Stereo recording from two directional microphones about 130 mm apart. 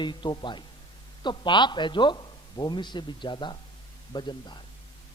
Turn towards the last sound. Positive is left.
turn(degrees=35)  # may be behind; listen again after turning